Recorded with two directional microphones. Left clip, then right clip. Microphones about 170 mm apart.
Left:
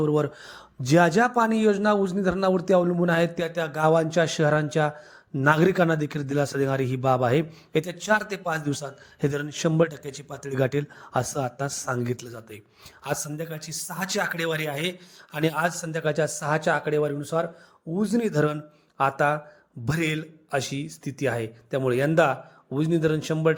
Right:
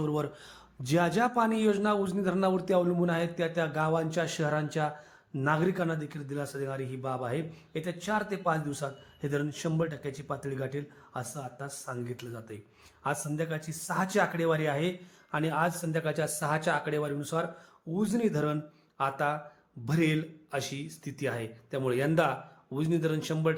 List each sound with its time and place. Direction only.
0.0 s speech: 25° left (ahead or behind)
5.5 s speech: 40° left (ahead or behind)
13.3 s a man's voice: centre (ahead or behind)
13.6 s speech: 40° left (ahead or behind)
13.8 s a man's voice: centre (ahead or behind)
14.1 s speech: 40° left (ahead or behind)